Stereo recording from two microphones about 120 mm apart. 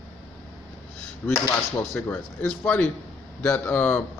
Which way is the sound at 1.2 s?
20° left (ahead or behind).